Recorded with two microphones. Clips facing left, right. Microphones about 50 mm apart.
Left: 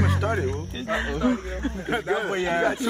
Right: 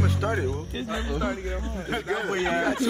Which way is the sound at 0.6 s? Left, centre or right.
Centre.